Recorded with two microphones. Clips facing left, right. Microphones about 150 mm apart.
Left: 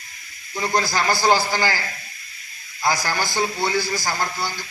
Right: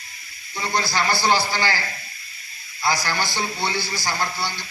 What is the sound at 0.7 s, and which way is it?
A man's voice, 45° left (ahead or behind).